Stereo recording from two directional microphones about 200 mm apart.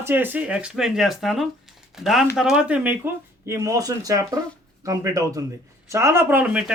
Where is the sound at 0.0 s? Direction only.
10° right (ahead or behind).